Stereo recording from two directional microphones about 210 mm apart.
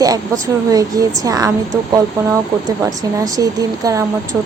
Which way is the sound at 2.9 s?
15° right (ahead or behind).